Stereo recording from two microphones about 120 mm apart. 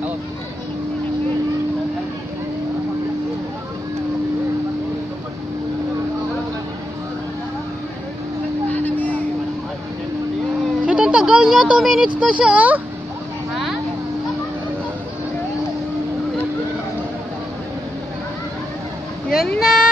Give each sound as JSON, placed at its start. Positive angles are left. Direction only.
{"t": 8.7, "sound": "vehicle", "side_deg": 15}
{"t": 10.9, "sound": "speech", "side_deg": -10}
{"t": 19.6, "sound": "a sound", "side_deg": -5}